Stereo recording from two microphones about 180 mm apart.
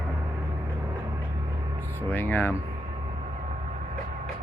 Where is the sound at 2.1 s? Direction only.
10° left (ahead or behind).